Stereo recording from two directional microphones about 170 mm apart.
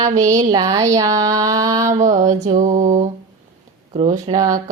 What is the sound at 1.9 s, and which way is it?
Mantra, 45° right (ahead or behind).